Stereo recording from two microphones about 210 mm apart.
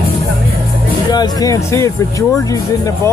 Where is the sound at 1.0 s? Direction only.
20° left (ahead or behind).